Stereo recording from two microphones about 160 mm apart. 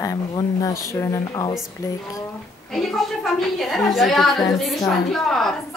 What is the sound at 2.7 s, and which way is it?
A woman's voice, centre (ahead or behind).